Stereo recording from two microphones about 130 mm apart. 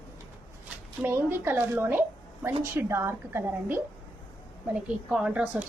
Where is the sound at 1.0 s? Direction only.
15° right (ahead or behind).